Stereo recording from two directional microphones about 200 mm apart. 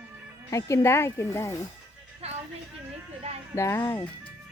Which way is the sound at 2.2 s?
30° right (ahead or behind).